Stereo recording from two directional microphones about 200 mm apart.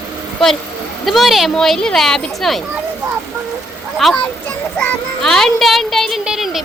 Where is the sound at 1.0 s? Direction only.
Centre (ahead or behind).